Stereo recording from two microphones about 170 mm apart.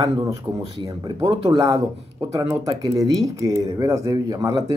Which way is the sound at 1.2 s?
30° right (ahead or behind).